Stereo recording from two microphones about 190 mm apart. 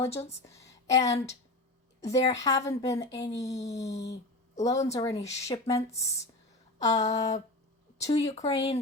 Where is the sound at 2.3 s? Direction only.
20° left (ahead or behind).